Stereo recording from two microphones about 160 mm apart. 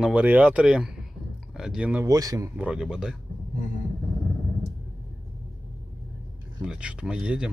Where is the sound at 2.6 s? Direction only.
5° right (ahead or behind).